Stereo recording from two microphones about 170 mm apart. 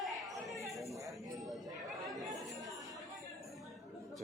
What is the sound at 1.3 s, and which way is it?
Chatter, centre (ahead or behind).